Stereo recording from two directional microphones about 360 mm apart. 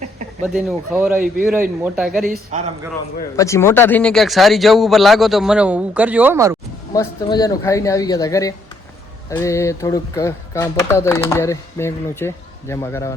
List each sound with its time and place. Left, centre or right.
0.4 s speech: centre
2.2 s a man's voice: right
3.3 s speech: centre
6.9 s speech: centre